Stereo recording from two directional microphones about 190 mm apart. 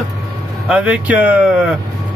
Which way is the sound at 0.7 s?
5° right (ahead or behind).